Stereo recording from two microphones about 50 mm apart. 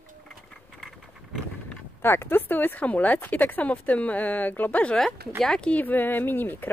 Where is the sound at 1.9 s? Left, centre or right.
Left.